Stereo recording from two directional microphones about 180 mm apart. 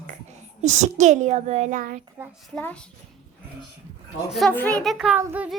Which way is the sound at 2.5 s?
5° left (ahead or behind).